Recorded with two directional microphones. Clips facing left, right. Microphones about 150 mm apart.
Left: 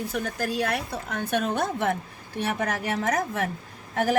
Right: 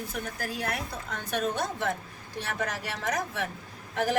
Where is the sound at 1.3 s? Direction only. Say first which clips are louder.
Left 3 dB; 55° left (ahead or behind).